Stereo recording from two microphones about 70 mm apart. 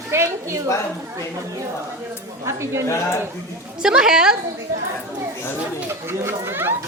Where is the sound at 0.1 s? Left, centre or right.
Right.